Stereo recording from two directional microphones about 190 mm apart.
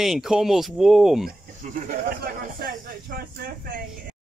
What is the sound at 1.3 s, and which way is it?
Speech, 45° right (ahead or behind).